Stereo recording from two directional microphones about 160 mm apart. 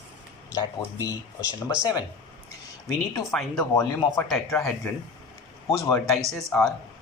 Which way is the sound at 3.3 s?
Centre (ahead or behind).